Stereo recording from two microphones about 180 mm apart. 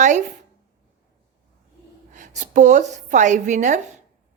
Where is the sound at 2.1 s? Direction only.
40° right (ahead or behind).